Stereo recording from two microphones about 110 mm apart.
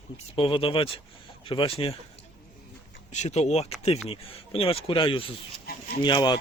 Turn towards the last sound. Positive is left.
turn(degrees=45)  # may be behind; listen again after turning